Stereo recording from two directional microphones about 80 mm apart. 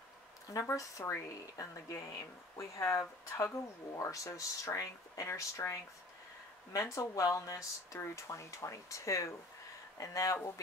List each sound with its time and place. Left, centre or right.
0.5 s speech: left